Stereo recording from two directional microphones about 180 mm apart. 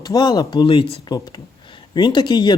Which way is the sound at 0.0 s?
20° left (ahead or behind).